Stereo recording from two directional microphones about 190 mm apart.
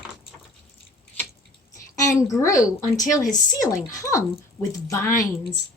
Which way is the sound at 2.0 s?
15° left (ahead or behind).